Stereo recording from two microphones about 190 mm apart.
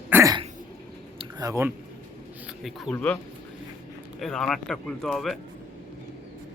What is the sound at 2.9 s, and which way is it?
Speech, 5° left (ahead or behind).